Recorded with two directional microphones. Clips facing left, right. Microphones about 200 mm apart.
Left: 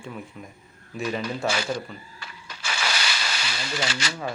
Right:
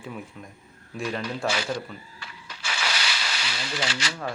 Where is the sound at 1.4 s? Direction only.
45° left (ahead or behind).